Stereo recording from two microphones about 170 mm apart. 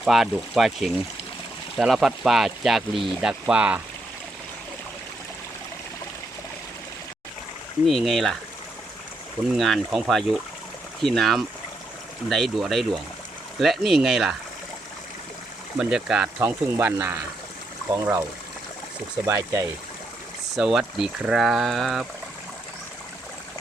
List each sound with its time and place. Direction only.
0.0 s speech: centre (ahead or behind)
7.9 s speech: centre (ahead or behind)
9.6 s speech: centre (ahead or behind)
15.8 s speech: 5° right (ahead or behind)
16.5 s speech: 15° right (ahead or behind)
19.3 s speech: 15° right (ahead or behind)
20.6 s speech: 5° right (ahead or behind)